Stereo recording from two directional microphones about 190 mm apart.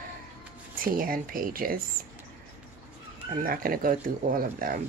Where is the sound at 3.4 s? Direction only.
50° right (ahead or behind).